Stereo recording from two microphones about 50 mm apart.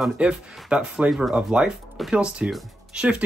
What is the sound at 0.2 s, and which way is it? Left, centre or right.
Speech, centre.